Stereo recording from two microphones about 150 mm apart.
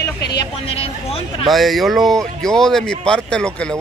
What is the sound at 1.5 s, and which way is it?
Speech, centre (ahead or behind).